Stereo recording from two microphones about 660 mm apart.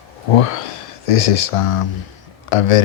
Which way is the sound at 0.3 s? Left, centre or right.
Left.